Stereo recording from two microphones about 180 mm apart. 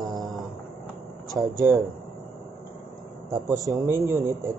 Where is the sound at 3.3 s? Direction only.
15° right (ahead or behind).